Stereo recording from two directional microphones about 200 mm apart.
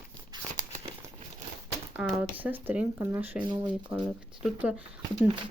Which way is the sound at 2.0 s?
5° right (ahead or behind).